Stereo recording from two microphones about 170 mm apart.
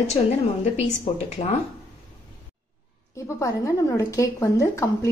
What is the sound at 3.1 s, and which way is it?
Speech, 15° left (ahead or behind).